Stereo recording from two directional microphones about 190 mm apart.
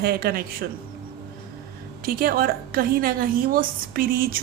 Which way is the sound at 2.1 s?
50° right (ahead or behind).